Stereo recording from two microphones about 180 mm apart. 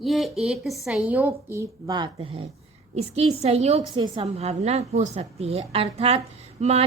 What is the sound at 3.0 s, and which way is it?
A woman's voice, 35° right (ahead or behind).